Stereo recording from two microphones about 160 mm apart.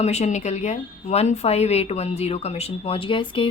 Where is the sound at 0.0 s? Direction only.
45° left (ahead or behind).